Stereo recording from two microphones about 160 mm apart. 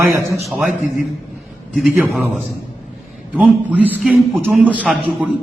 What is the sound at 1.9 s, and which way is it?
Speech, 10° right (ahead or behind).